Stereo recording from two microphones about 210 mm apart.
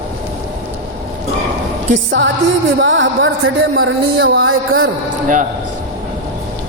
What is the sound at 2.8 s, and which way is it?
Music, 60° right (ahead or behind).